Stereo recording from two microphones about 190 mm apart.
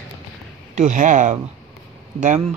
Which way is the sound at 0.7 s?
40° right (ahead or behind).